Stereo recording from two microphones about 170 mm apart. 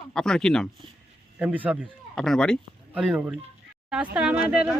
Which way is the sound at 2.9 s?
10° right (ahead or behind).